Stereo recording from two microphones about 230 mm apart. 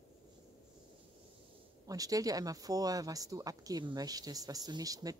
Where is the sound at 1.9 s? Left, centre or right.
Centre.